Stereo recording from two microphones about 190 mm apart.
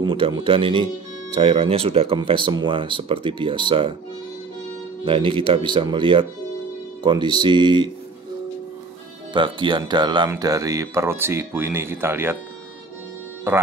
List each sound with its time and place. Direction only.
0.0 s speech: 20° right (ahead or behind)
5.0 s speech: 25° right (ahead or behind)
9.3 s speech: 25° right (ahead or behind)
13.5 s speech: 10° right (ahead or behind)